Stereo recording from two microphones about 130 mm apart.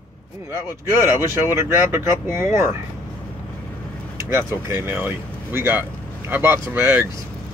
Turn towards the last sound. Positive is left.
turn(degrees=-15)  # may be behind; listen again after turning